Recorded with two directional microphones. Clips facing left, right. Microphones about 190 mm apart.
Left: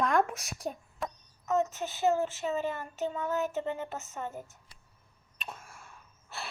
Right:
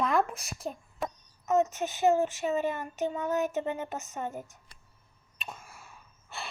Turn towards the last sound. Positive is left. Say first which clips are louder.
# right 1 dB
turn(degrees=0)  # may be behind; listen again after turning